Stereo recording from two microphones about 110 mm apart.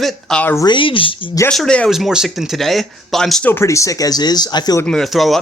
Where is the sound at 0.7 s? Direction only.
50° left (ahead or behind).